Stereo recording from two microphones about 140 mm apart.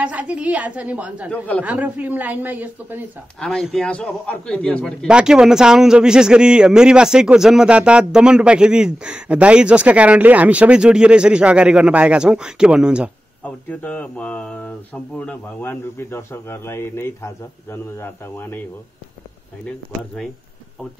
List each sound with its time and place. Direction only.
0.0 s a man's voice: 10° right (ahead or behind)
3.3 s speech: 5° left (ahead or behind)
5.0 s a man's voice: 5° right (ahead or behind)
13.4 s speech: 10° left (ahead or behind)